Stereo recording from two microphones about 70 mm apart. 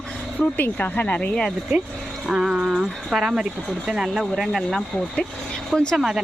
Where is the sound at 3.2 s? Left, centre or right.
Centre.